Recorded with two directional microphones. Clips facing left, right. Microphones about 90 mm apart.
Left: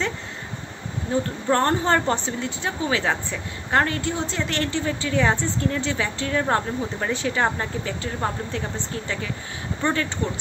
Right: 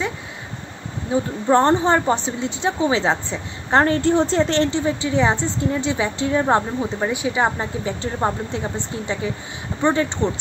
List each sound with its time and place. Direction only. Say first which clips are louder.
1.1 s speech: right 5 dB; 20° right (ahead or behind)